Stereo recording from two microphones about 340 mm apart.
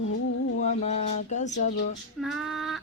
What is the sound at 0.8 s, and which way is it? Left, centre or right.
Music, centre.